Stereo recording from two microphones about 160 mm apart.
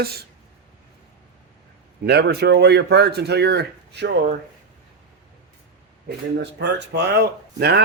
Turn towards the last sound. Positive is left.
turn(degrees=-85)